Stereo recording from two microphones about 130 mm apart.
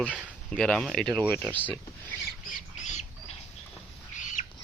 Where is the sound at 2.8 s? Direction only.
65° left (ahead or behind).